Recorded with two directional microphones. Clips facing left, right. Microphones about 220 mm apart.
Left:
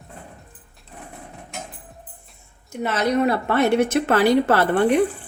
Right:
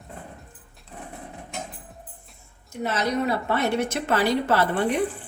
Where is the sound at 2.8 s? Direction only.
60° left (ahead or behind).